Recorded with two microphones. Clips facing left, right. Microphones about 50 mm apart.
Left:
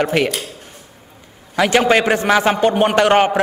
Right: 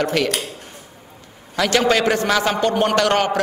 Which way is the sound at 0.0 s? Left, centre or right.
Left.